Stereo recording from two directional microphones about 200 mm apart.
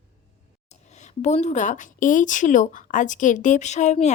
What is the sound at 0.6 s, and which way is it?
Speech, 35° left (ahead or behind).